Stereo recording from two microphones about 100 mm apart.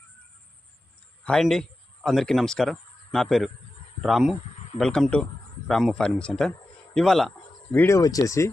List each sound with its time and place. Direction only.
1.2 s a man's voice: 5° left (ahead or behind)
4.8 s a man's voice: 5° left (ahead or behind)
7.7 s speech: 20° left (ahead or behind)
7.9 s speech: 35° left (ahead or behind)